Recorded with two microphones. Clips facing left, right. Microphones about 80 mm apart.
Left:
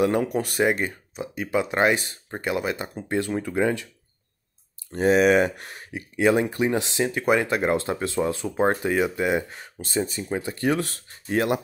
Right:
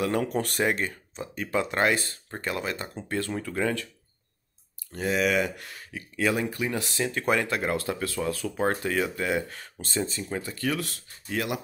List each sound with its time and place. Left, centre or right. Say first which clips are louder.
0.0 s speech: left 5 dB; left
0.3 s speech: left 4 dB; centre
4.9 s speech: left 7 dB; left